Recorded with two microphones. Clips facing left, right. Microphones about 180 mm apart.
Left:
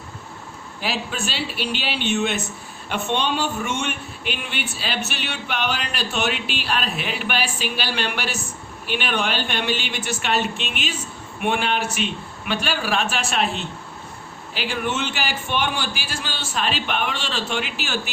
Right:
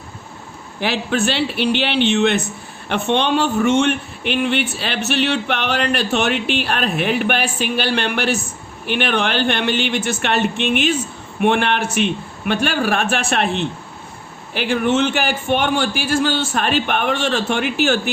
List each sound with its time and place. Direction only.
0.8 s a man's voice: 60° right (ahead or behind)
14.5 s a man's voice: 55° right (ahead or behind)